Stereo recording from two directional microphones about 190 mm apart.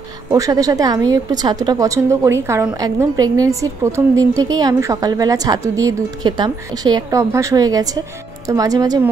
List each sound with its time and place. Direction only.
0.3 s a woman's voice: 20° right (ahead or behind)